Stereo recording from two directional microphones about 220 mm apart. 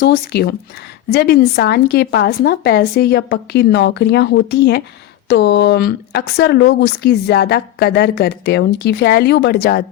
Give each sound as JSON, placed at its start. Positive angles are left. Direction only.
{"t": 0.0, "sound": "speech", "side_deg": 45}